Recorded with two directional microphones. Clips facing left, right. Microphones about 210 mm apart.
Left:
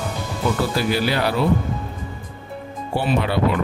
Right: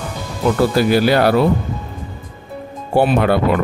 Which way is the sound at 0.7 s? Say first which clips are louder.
Right 7 dB; 50° right (ahead or behind).